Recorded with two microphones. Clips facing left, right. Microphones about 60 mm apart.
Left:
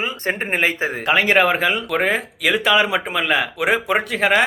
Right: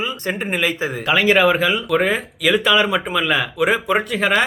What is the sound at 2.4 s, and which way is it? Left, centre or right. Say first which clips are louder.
Speech: right 1 dB; left.